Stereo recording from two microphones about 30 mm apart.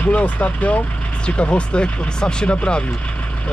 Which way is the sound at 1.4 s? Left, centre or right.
Left.